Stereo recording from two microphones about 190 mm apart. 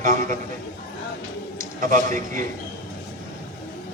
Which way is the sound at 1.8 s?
45° right (ahead or behind).